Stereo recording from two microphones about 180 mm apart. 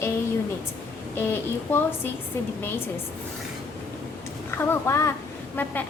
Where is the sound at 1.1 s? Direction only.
10° left (ahead or behind).